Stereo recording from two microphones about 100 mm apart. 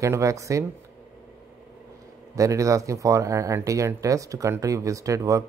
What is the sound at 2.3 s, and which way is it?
Speech, 35° right (ahead or behind).